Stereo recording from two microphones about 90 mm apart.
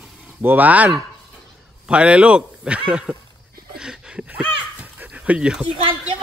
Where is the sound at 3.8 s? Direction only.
10° right (ahead or behind).